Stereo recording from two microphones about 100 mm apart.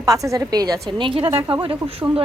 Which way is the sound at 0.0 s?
35° right (ahead or behind).